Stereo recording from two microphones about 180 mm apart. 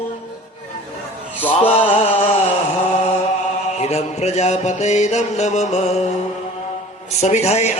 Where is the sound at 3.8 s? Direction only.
35° left (ahead or behind).